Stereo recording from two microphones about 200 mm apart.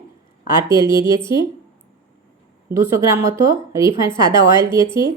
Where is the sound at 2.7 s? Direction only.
15° right (ahead or behind).